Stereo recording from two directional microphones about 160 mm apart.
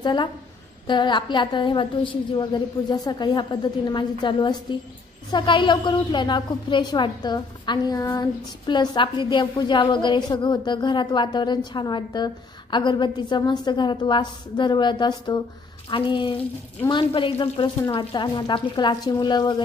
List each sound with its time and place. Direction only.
0.0 s a woman's voice: 25° left (ahead or behind)